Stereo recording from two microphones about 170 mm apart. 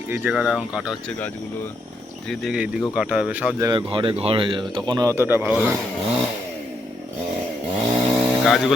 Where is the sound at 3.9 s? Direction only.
30° right (ahead or behind); by 5.6 s 10° right (ahead or behind).